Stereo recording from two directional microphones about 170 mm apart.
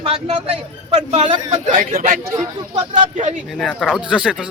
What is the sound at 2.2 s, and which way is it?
Speech, 20° right (ahead or behind).